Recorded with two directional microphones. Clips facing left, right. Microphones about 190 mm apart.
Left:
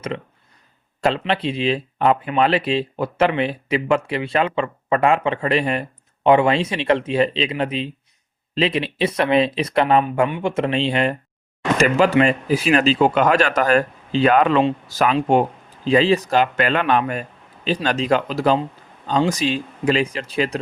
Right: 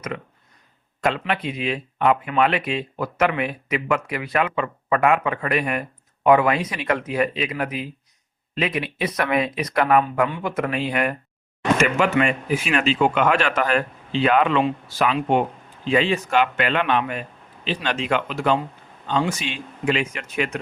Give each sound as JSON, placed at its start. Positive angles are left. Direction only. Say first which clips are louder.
{"t": 1.0, "sound": "speech", "louder": "left 3 dB", "side_deg": 30}